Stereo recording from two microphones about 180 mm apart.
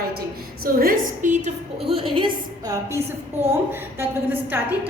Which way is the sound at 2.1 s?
25° right (ahead or behind).